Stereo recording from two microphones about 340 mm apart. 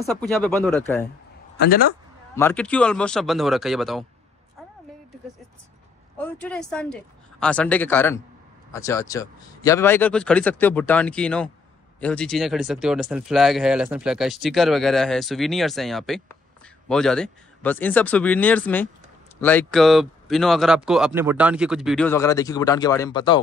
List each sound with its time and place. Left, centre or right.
0.3 s speech: centre
1.6 s speech: left
2.3 s speech: centre
6.1 s speech: centre